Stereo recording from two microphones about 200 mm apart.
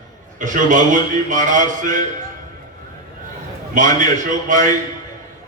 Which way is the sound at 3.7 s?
40° right (ahead or behind).